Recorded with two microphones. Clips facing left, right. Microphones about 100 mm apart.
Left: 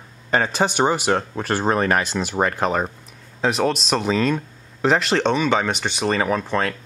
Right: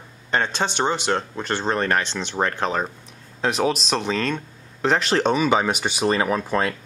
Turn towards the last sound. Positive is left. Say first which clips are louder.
# even
turn(degrees=-5)  # may be behind; listen again after turning